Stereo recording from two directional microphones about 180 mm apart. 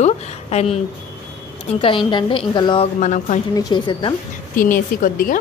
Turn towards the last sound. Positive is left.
turn(degrees=50)  # may be behind; listen again after turning